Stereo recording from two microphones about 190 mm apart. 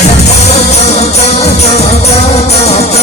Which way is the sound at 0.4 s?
35° left (ahead or behind).